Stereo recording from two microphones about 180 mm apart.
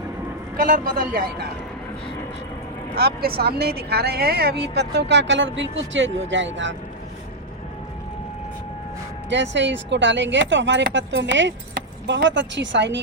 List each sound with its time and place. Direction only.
1.1 s speech: 55° right (ahead or behind)
2.9 s speech: 60° right (ahead or behind); by 6.7 s 90° right
9.3 s speech: 85° right